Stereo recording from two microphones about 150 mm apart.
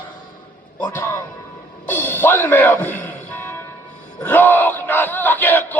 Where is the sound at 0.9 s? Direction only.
15° left (ahead or behind).